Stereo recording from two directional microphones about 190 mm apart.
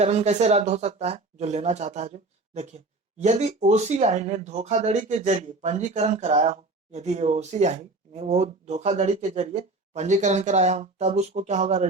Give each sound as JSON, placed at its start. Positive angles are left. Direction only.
{"t": 0.0, "sound": "speech", "side_deg": -35}